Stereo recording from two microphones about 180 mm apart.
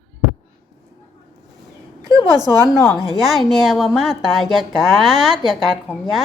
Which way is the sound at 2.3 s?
20° right (ahead or behind).